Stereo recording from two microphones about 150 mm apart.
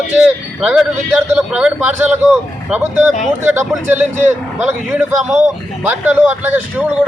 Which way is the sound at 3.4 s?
15° right (ahead or behind).